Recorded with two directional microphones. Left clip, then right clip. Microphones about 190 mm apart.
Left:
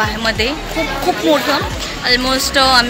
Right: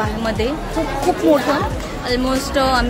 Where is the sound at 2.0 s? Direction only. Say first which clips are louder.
Left 5 dB; 10° right (ahead or behind).